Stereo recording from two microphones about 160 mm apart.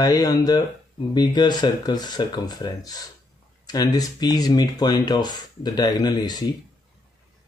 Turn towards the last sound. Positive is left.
turn(degrees=25)  # may be behind; listen again after turning